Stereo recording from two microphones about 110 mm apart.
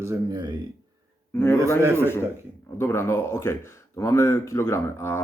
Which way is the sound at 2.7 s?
25° left (ahead or behind).